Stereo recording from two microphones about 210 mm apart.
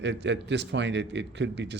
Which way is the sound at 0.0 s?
55° right (ahead or behind).